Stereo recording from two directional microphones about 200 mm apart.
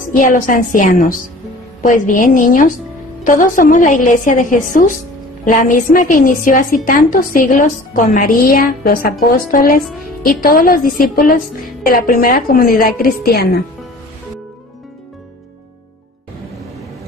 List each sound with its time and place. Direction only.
0.1 s a woman's voice: 40° left (ahead or behind)